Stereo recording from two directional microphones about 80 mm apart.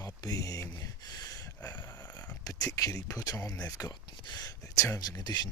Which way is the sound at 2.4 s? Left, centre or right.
Left.